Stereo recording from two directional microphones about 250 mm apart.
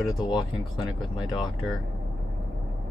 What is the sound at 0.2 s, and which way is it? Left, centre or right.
Speech, centre.